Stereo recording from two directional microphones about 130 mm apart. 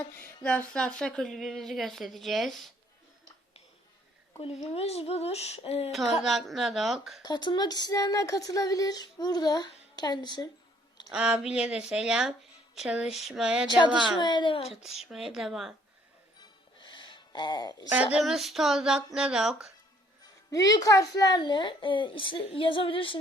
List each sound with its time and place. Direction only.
0.0 s a sound: 10° left (ahead or behind)
0.4 s speech: 5° left (ahead or behind)
4.7 s speech: 50° left (ahead or behind)
6.2 s speech: centre (ahead or behind)
7.2 s speech: 35° left (ahead or behind)
11.1 s speech: 5° right (ahead or behind)
14.2 s speech: 35° left (ahead or behind)
14.7 s speech: centre (ahead or behind)
16.4 s music: 40° left (ahead or behind)
18.1 s speech: centre (ahead or behind)
20.5 s speech: 30° left (ahead or behind); by 23.1 s 45° left (ahead or behind)